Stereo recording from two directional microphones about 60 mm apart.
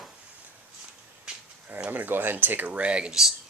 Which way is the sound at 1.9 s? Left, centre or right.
Right.